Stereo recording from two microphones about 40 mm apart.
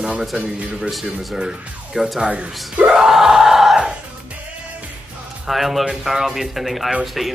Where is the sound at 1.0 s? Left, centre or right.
Centre.